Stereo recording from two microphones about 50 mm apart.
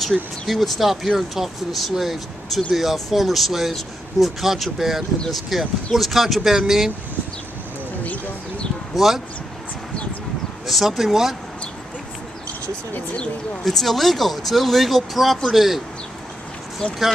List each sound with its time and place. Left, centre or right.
0.1 s speech: centre
8.0 s a sound: left
8.9 s speech: centre
10.7 s speech: centre
13.7 s speech: centre
16.8 s speech: centre